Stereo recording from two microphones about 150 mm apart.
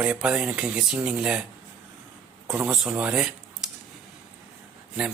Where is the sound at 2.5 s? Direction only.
5° right (ahead or behind).